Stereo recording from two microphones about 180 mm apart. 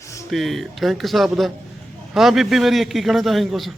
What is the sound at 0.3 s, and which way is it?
A man's voice, centre (ahead or behind).